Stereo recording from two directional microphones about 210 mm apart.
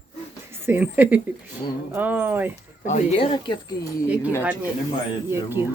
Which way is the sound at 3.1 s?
25° left (ahead or behind).